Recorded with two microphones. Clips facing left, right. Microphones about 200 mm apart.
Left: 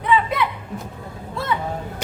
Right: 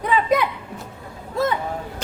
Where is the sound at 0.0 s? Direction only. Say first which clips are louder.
Right 1 dB; 40° right (ahead or behind).